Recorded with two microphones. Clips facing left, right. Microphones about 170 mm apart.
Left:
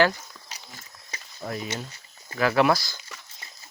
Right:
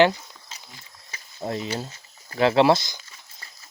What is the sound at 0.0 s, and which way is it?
Walk, 25° right (ahead or behind).